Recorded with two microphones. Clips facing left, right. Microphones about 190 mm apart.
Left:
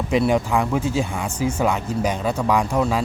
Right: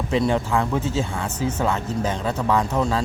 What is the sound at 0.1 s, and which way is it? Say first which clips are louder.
Speech: left 2 dB; 15° left (ahead or behind).